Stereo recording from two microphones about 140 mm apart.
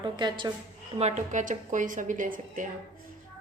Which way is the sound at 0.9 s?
55° right (ahead or behind).